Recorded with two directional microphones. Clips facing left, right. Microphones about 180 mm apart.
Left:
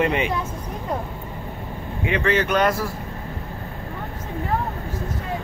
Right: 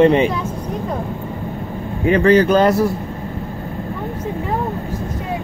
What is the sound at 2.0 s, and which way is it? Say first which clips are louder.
Speech: right 9 dB; 40° right (ahead or behind).